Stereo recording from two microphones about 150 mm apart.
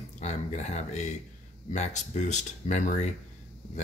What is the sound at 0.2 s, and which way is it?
Speech, 50° left (ahead or behind).